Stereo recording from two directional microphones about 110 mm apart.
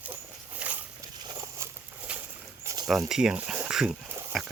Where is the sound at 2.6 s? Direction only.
40° right (ahead or behind).